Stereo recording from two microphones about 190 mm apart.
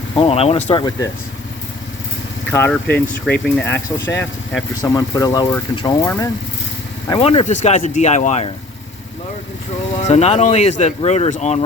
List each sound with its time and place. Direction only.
0.2 s speech: 30° left (ahead or behind)
2.5 s speech: 10° left (ahead or behind)
7.1 s speech: 30° left (ahead or behind)
10.0 s speech: 35° left (ahead or behind)